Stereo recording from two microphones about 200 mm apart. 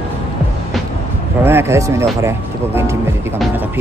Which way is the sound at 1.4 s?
10° right (ahead or behind).